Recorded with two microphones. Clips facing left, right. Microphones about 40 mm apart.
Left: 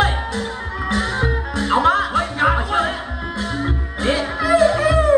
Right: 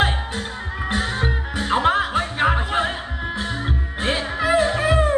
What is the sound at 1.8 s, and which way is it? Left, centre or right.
Music, right.